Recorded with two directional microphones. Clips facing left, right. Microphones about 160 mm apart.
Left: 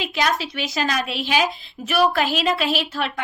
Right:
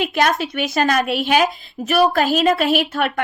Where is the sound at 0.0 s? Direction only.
50° right (ahead or behind).